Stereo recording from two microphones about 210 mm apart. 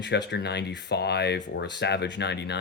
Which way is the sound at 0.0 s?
55° left (ahead or behind).